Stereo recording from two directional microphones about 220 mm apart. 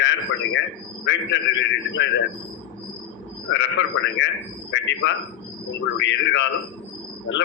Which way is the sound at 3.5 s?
55° left (ahead or behind).